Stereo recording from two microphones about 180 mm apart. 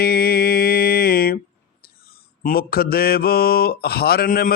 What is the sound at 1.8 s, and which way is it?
Mantra, 55° left (ahead or behind).